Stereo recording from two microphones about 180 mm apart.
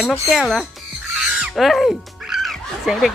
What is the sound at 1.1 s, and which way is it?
Music, 5° right (ahead or behind).